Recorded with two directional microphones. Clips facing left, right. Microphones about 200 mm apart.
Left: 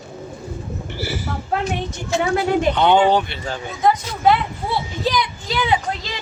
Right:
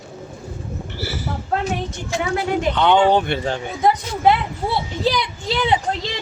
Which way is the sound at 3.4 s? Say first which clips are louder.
Even; 25° right (ahead or behind).